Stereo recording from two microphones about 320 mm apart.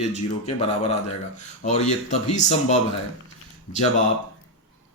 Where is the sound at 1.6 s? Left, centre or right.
Left.